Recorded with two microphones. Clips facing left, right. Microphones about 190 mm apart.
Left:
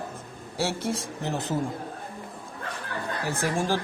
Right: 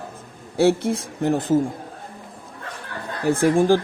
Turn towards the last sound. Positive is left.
turn(degrees=-55)  # may be behind; listen again after turning